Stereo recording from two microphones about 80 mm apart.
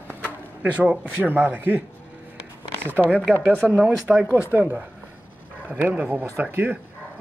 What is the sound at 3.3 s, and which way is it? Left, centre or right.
Speech, centre.